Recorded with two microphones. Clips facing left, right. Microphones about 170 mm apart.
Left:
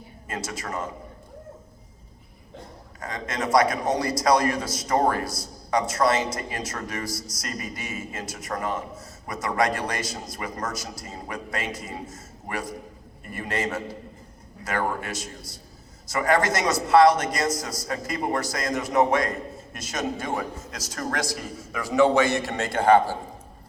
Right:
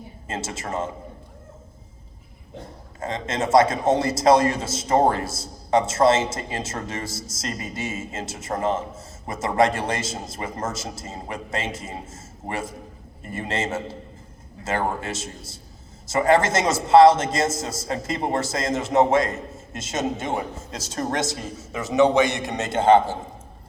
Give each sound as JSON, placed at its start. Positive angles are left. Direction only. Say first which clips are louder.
{"t": 0.3, "sound": "a man's voice", "louder": "right 2 dB", "side_deg": -25}
{"t": 3.0, "sound": "a man's voice", "louder": "right 4 dB", "side_deg": -25}